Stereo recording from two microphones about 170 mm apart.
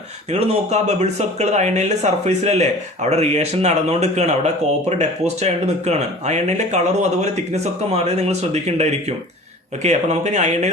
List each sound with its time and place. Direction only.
0.3 s speech: 40° right (ahead or behind)